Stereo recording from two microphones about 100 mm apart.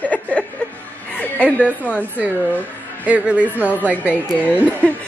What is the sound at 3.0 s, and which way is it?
A woman's voice, 15° right (ahead or behind).